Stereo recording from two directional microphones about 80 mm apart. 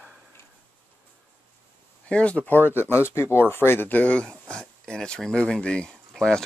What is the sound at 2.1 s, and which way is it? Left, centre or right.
Speech, centre.